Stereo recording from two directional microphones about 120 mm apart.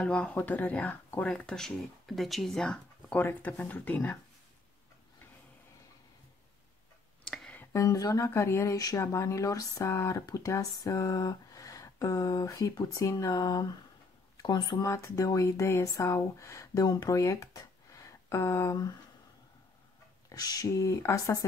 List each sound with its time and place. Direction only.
0.0 s speech: 10° left (ahead or behind)
3.2 s speech: 15° left (ahead or behind)
7.2 s a sound: 10° left (ahead or behind)
7.7 s speech: 25° left (ahead or behind)
20.2 s speech: 30° left (ahead or behind)